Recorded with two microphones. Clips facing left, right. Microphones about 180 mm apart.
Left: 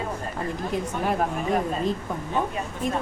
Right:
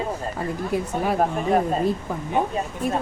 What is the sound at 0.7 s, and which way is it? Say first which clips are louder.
Speech: right 3 dB; 10° right (ahead or behind).